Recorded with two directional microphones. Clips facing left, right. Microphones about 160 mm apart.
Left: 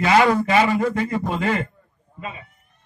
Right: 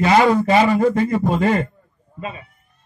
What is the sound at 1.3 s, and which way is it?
Speech, 40° right (ahead or behind).